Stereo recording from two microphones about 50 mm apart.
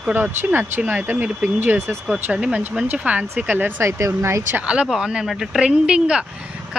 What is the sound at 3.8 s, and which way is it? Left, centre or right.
Speech, right.